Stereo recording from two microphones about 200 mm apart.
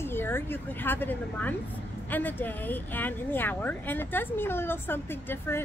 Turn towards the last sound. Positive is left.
turn(degrees=10)  # may be behind; listen again after turning